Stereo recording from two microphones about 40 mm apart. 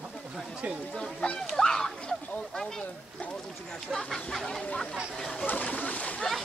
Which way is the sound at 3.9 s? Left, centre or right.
Centre.